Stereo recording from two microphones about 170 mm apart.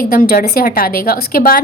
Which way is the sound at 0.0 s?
60° left (ahead or behind).